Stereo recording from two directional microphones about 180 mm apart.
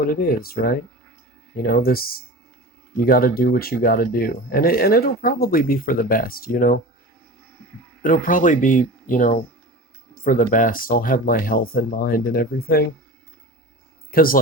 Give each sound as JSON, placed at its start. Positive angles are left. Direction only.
{"t": 0.1, "sound": "speech", "side_deg": 55}
{"t": 8.0, "sound": "speech", "side_deg": 50}
{"t": 14.1, "sound": "speech", "side_deg": 55}